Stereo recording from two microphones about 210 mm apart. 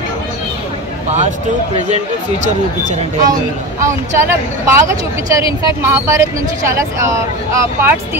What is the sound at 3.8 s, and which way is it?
Speech, 15° right (ahead or behind).